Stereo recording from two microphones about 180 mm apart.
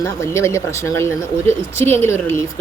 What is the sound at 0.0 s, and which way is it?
Speech, 15° left (ahead or behind).